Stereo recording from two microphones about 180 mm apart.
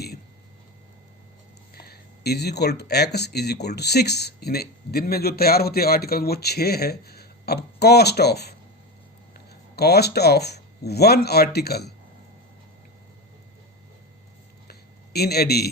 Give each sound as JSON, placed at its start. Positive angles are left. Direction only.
{"t": 1.7, "sound": "speech", "side_deg": 60}
{"t": 9.7, "sound": "speech", "side_deg": 65}
{"t": 14.7, "sound": "a sound", "side_deg": 60}